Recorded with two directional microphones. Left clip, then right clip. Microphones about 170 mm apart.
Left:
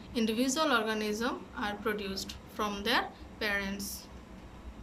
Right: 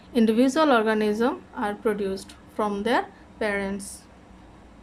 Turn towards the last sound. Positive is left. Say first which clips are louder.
# right 6 dB
turn(degrees=-45)  # may be behind; listen again after turning